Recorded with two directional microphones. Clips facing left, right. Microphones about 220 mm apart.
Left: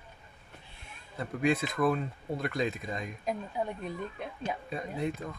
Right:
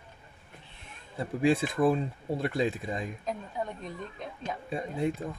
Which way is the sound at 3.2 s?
10° left (ahead or behind).